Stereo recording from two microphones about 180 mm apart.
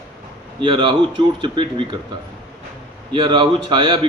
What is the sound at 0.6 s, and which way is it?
A man's voice, 30° right (ahead or behind).